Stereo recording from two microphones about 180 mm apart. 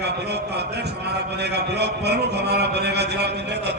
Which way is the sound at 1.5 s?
65° right (ahead or behind).